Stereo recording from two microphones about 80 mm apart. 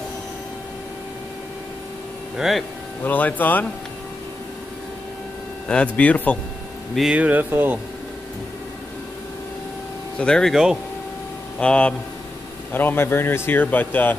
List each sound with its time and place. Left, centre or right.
2.3 s speech: centre
3.0 s speech: left
5.7 s speech: centre
7.2 s speech: right
10.1 s speech: centre
10.5 s speech: centre
11.6 s speech: centre
12.7 s speech: left